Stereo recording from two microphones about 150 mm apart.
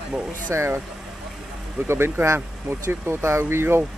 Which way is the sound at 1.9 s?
15° right (ahead or behind).